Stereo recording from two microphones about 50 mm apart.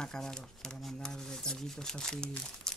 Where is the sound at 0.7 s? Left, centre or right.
Centre.